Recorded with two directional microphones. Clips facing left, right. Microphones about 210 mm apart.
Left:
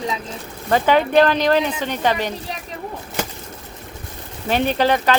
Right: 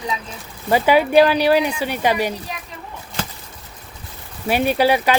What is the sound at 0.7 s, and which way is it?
Speech, 10° right (ahead or behind).